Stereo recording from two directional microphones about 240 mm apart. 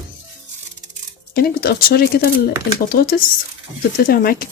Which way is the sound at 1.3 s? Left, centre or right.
Left.